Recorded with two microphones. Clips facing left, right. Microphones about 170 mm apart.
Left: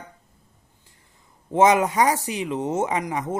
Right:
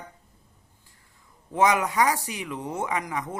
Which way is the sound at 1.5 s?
25° left (ahead or behind).